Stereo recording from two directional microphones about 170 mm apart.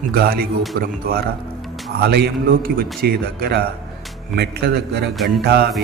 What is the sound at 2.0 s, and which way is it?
A man's voice, 65° right (ahead or behind).